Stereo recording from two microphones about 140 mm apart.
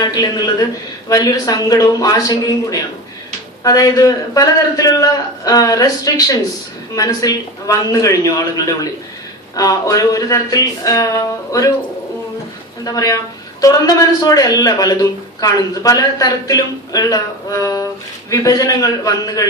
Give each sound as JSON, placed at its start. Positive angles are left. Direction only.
{"t": 0.0, "sound": "a man's voice", "side_deg": 30}
{"t": 12.8, "sound": "a woman's voice", "side_deg": 25}